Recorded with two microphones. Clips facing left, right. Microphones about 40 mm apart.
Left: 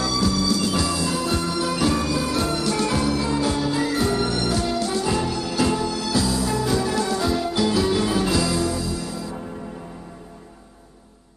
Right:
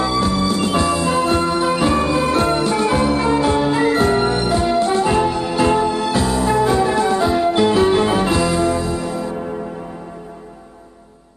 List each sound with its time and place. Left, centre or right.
0.0 s music: right